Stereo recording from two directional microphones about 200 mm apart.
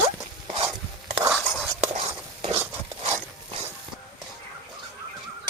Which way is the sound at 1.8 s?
35° right (ahead or behind).